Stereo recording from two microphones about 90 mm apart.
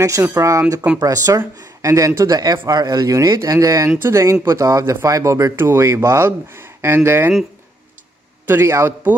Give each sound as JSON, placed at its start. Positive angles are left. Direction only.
{"t": 0.0, "sound": "speech", "side_deg": -35}
{"t": 8.5, "sound": "a man's voice", "side_deg": -25}